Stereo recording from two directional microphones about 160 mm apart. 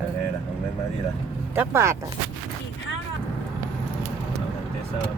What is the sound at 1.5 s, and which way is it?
Speech, 15° right (ahead or behind).